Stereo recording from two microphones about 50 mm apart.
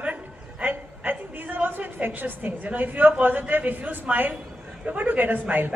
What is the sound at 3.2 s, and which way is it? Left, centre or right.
A woman's voice, right.